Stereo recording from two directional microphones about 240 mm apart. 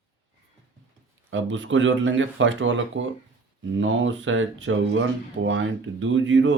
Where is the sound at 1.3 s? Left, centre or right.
Right.